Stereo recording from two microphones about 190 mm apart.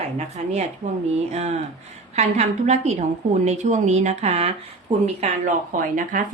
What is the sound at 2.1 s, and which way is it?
A woman's voice, 35° right (ahead or behind).